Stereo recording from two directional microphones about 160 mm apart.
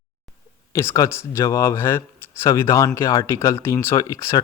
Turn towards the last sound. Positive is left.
turn(degrees=20)  # may be behind; listen again after turning